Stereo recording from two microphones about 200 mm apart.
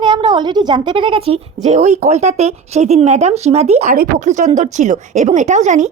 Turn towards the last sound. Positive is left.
turn(degrees=-35)  # may be behind; listen again after turning